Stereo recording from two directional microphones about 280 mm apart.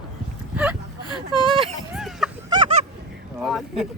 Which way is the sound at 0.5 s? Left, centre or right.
Centre.